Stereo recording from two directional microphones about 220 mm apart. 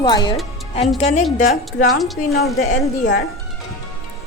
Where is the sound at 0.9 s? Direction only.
30° left (ahead or behind).